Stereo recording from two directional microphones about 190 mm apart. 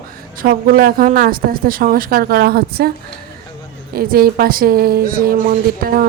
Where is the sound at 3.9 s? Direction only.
50° right (ahead or behind).